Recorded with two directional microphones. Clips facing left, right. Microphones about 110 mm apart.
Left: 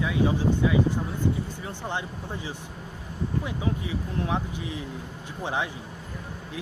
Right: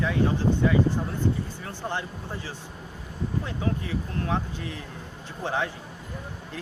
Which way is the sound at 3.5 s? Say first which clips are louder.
Even; 15° left (ahead or behind).